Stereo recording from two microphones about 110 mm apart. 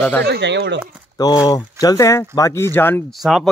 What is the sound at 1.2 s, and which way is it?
Speech, 40° left (ahead or behind).